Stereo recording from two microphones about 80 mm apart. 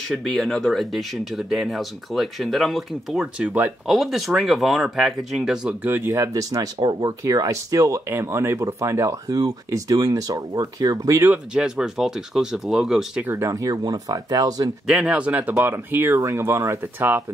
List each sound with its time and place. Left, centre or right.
0.1 s speech: centre
3.3 s speech: centre
3.8 s speech: centre
5.9 s speech: right
6.1 s speech: right
6.8 s speech: right
7.2 s speech: right
11.5 s speech: centre
13.2 s speech: right
13.5 s speech: right
14.9 s speech: centre; by 16.9 s right